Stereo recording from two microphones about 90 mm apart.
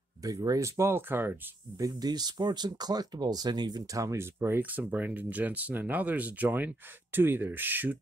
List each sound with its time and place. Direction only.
0.2 s speech: 40° right (ahead or behind); by 1.3 s 25° right (ahead or behind)
1.8 s speech: 45° right (ahead or behind)
4.0 s speech: 30° right (ahead or behind)